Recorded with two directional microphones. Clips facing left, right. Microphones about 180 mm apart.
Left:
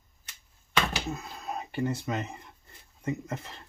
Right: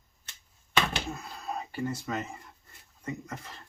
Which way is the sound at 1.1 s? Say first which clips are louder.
Left 1 dB; 20° left (ahead or behind).